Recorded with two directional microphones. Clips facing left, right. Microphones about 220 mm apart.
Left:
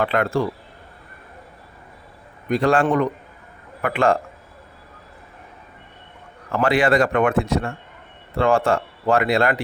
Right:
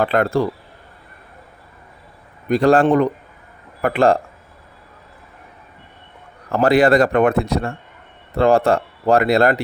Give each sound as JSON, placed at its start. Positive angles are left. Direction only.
{"t": 0.0, "sound": "a man's voice", "side_deg": -40}
{"t": 2.5, "sound": "a man's voice", "side_deg": -35}
{"t": 6.5, "sound": "a man's voice", "side_deg": -40}